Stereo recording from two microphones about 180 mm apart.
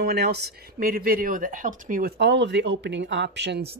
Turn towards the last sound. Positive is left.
turn(degrees=-75)  # may be behind; listen again after turning